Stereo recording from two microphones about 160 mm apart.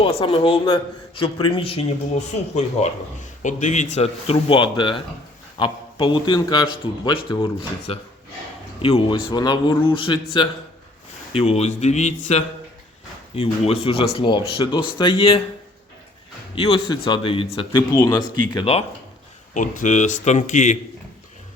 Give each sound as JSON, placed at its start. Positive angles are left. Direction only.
{"t": 0.0, "sound": "a man's voice", "side_deg": 35}
{"t": 16.6, "sound": "a man's voice", "side_deg": 35}
{"t": 18.5, "sound": "a man's voice", "side_deg": 40}
{"t": 19.5, "sound": "a man's voice", "side_deg": 50}